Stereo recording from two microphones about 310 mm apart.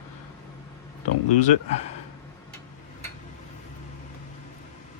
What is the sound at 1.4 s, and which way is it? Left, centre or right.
Speech, left.